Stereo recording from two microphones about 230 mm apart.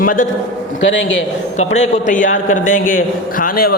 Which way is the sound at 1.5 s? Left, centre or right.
Left.